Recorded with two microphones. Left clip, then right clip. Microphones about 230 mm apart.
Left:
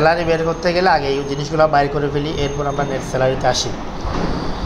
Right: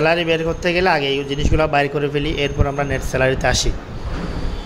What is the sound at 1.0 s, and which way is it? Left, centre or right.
Speech, right.